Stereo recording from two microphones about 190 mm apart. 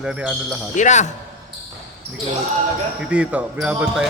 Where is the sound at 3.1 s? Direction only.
5° right (ahead or behind).